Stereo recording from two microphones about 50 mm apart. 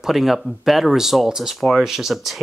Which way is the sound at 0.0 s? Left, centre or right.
Centre.